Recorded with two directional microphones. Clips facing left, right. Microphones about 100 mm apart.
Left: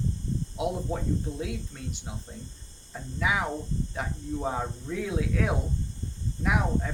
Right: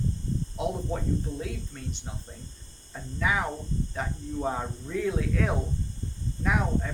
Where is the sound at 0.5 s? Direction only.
5° left (ahead or behind).